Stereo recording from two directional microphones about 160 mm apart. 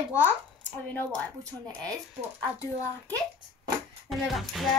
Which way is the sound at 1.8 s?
20° right (ahead or behind).